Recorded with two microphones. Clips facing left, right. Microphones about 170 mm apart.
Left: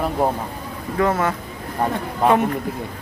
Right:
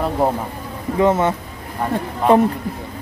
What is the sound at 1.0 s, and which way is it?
Speech, 25° right (ahead or behind).